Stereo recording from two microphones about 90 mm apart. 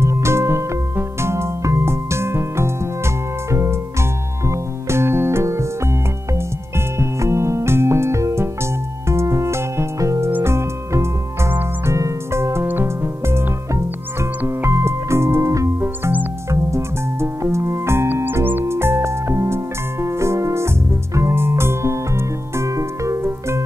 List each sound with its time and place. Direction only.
0.0 s music: 30° right (ahead or behind)
4.5 s music: 30° right (ahead or behind)
7.0 s music: 30° right (ahead or behind)
14.6 s keyboard: 30° right (ahead or behind)
15.8 s music: 20° right (ahead or behind)
16.4 s music: 30° right (ahead or behind)